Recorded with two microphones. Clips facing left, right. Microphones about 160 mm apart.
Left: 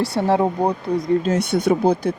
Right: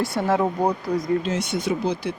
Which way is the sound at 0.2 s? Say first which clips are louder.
Left 3 dB; 30° left (ahead or behind).